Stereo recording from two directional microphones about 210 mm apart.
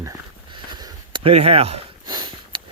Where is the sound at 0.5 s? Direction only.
20° right (ahead or behind).